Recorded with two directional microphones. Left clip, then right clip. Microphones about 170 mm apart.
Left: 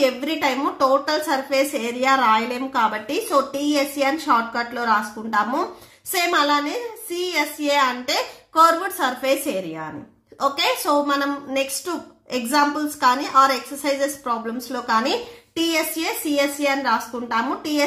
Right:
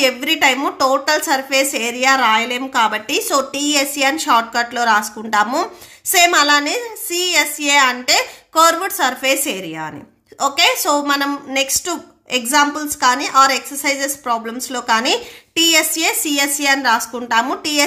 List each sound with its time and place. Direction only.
0.0 s a woman's voice: 35° right (ahead or behind)